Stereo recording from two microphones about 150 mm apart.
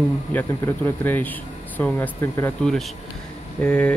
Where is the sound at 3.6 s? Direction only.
10° left (ahead or behind).